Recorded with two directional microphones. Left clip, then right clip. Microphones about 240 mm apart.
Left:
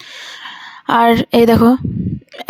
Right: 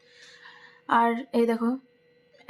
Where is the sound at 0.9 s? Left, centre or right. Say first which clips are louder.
Left 11 dB; left.